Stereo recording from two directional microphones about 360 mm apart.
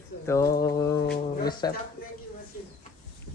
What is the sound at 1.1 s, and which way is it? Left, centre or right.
Speech, left.